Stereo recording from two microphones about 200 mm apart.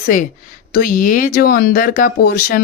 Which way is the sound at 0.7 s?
45° left (ahead or behind).